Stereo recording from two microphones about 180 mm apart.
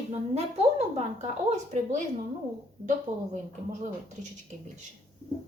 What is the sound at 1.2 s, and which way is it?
Speech, 40° right (ahead or behind).